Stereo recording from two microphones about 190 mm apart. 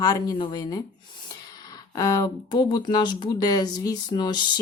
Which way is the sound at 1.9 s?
20° left (ahead or behind).